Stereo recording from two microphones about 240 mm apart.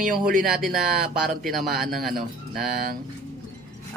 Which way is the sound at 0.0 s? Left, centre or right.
Right.